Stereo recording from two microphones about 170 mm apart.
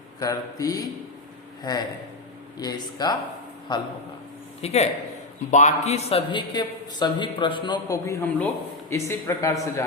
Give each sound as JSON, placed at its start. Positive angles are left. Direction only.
{"t": 0.2, "sound": "a man's voice", "side_deg": 20}
{"t": 4.6, "sound": "a man's voice", "side_deg": 40}